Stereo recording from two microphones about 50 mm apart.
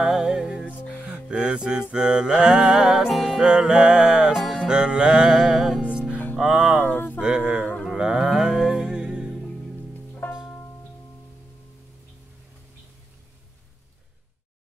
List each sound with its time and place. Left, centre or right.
0.0 s music: centre
5.8 s music: right
6.8 s a sound: left
7.2 s a sound: centre
7.9 s music: centre
10.2 s music: left